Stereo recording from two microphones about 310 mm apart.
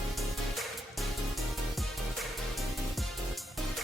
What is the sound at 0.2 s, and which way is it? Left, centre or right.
Music, centre.